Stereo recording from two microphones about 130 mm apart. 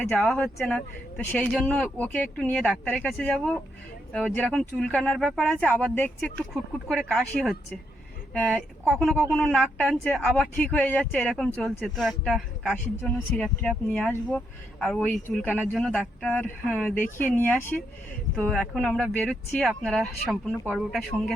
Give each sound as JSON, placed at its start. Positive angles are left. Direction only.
{"t": 0.2, "sound": "speech", "side_deg": 5}